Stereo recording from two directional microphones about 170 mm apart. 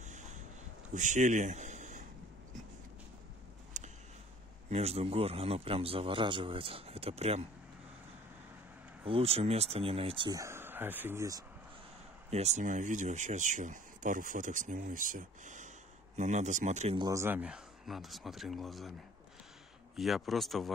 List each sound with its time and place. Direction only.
0.0 s a sound: 45° right (ahead or behind)
0.9 s speech: 45° right (ahead or behind)
3.8 s a sound: 45° right (ahead or behind)
4.6 s a man's voice: 40° right (ahead or behind)
9.0 s a man's voice: 35° right (ahead or behind)
10.4 s speech: 15° right (ahead or behind)
12.3 s speech: 40° right (ahead or behind)
17.0 s speech: 15° right (ahead or behind); by 18.9 s centre (ahead or behind)
20.0 s speech: centre (ahead or behind)